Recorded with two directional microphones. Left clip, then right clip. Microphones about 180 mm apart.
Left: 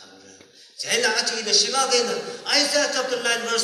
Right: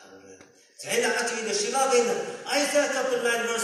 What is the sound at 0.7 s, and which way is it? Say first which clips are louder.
Speech: left 4 dB; 25° right (ahead or behind).